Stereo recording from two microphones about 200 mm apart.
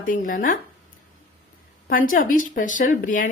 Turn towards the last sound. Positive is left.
turn(degrees=40)  # may be behind; listen again after turning